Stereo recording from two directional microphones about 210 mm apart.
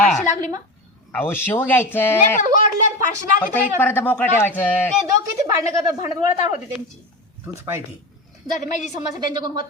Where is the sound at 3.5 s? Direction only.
10° left (ahead or behind).